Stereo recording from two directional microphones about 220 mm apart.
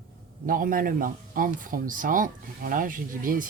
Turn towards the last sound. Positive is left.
turn(degrees=-40)  # may be behind; listen again after turning